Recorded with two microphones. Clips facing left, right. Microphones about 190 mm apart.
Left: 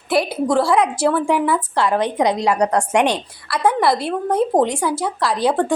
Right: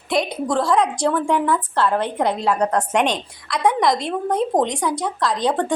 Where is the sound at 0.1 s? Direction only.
5° left (ahead or behind).